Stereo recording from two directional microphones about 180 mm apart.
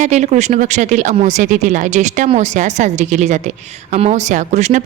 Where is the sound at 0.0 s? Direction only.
40° right (ahead or behind).